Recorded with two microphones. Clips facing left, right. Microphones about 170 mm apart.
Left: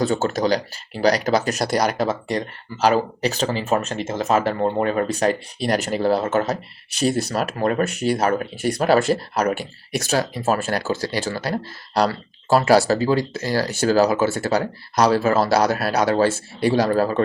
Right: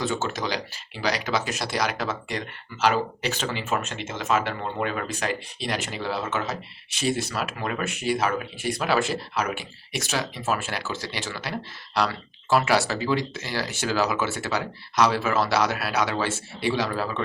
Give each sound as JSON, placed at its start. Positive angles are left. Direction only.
{"t": 0.0, "sound": "speech", "side_deg": 35}